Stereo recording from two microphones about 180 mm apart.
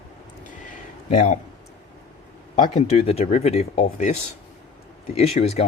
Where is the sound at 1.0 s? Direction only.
40° left (ahead or behind).